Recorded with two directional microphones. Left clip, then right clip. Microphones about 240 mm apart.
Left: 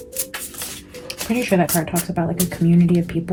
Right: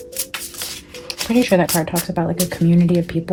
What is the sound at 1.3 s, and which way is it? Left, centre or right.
Speech, right.